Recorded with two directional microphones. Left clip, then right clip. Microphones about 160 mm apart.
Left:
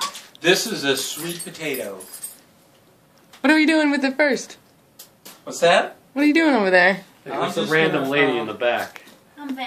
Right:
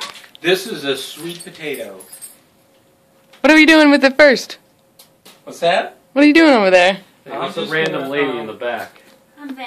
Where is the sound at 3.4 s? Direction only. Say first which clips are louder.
Right 8 dB; 40° right (ahead or behind).